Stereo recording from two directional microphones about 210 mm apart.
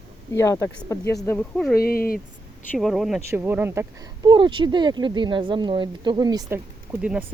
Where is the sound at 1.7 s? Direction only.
45° left (ahead or behind).